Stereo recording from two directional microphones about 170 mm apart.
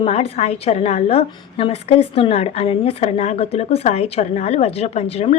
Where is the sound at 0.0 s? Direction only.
35° left (ahead or behind).